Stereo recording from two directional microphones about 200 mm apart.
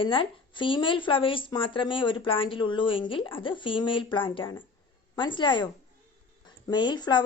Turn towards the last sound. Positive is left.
turn(degrees=20)  # may be behind; listen again after turning